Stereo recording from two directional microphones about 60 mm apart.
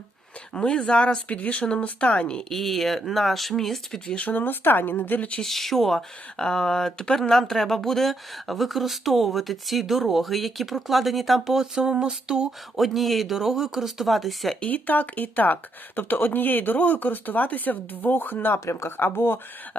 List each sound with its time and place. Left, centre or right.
0.5 s speech: centre
2.5 s speech: centre
4.0 s speech: centre
4.3 s speech: left
5.4 s speech: centre
12.5 s speech: centre
14.6 s speech: left
18.6 s speech: left